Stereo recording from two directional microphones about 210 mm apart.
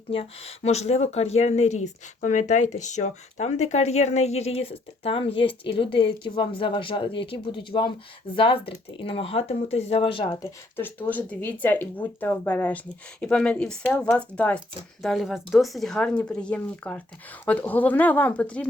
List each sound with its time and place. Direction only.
0.1 s speech: 30° left (ahead or behind)
10.8 s speech: 10° left (ahead or behind)